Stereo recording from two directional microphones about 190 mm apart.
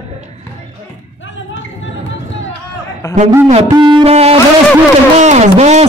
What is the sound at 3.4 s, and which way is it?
Speech, 40° right (ahead or behind).